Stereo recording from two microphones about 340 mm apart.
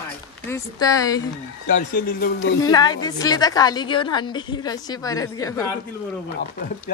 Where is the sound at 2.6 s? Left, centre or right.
Centre.